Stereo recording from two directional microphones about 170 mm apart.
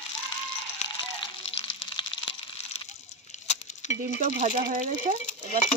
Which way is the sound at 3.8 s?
45° left (ahead or behind).